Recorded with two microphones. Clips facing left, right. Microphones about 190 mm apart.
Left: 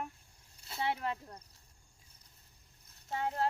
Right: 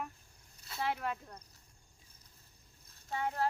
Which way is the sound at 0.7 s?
25° left (ahead or behind).